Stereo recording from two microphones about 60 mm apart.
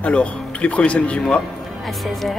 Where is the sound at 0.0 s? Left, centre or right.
Left.